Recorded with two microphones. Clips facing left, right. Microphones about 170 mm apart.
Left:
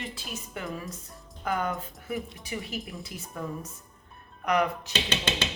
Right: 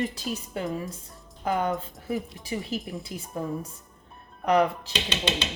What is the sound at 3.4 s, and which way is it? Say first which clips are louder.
A woman's voice: right 4 dB; 30° right (ahead or behind).